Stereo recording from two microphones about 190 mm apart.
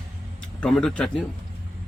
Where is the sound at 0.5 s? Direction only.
5° left (ahead or behind).